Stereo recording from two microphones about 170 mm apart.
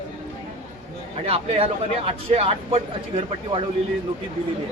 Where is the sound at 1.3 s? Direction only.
35° right (ahead or behind).